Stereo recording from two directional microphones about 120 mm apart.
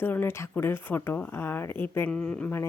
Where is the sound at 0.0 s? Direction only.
15° left (ahead or behind).